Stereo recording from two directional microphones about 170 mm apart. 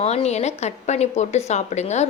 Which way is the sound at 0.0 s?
40° left (ahead or behind).